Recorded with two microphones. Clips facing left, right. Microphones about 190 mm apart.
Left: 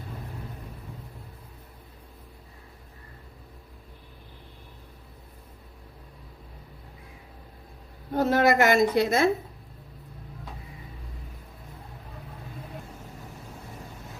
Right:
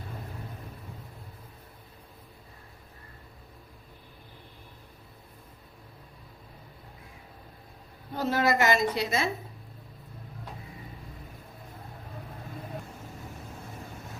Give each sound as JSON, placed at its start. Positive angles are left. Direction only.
{"t": 8.1, "sound": "a woman's voice", "side_deg": 50}